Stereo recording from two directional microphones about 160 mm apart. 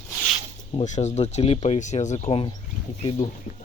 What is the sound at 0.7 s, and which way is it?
Speech, 40° left (ahead or behind).